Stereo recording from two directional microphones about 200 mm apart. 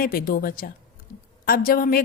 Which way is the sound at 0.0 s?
45° left (ahead or behind).